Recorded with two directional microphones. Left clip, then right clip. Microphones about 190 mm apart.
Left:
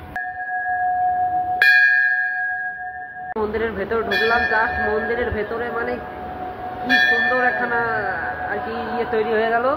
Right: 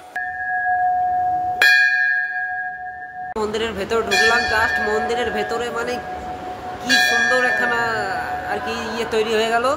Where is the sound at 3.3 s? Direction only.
10° right (ahead or behind).